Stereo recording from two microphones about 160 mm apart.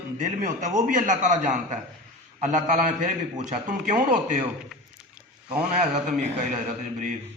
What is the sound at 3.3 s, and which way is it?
Speech, 55° right (ahead or behind).